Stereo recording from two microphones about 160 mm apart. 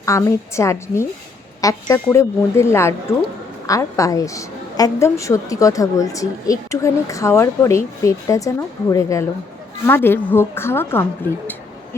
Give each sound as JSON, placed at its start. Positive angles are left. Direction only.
{"t": 0.0, "sound": "a woman's voice", "side_deg": 20}